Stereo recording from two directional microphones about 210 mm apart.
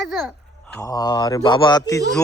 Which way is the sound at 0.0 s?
Centre (ahead or behind).